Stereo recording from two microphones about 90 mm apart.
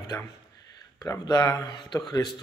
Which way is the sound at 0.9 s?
40° left (ahead or behind).